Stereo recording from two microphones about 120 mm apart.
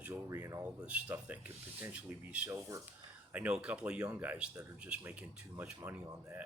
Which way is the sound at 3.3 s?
10° right (ahead or behind).